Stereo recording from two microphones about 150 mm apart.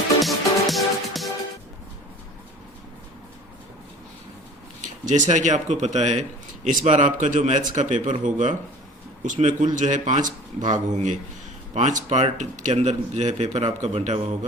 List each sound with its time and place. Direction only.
0.2 s music: centre (ahead or behind)
5.0 s a man's voice: 55° right (ahead or behind)